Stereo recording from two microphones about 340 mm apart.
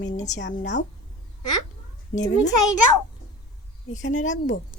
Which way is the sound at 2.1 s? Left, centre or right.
Left.